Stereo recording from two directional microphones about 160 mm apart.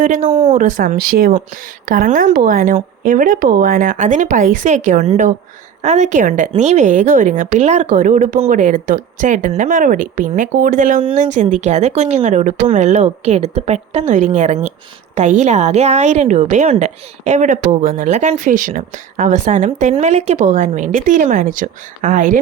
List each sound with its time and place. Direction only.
0.0 s a woman's voice: 55° right (ahead or behind)